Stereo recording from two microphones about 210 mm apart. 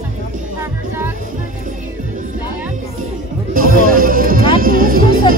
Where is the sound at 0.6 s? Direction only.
10° right (ahead or behind).